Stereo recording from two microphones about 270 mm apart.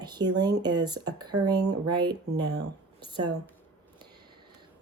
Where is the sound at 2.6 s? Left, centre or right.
Centre.